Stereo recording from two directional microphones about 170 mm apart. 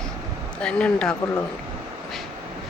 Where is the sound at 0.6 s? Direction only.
5° left (ahead or behind).